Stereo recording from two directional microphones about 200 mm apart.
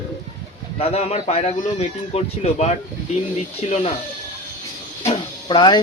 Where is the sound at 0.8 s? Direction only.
30° left (ahead or behind).